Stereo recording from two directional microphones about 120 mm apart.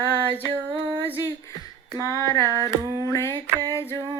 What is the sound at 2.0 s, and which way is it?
Female singing, 30° left (ahead or behind).